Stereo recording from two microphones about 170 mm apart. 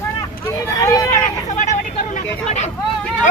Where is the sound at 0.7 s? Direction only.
20° left (ahead or behind).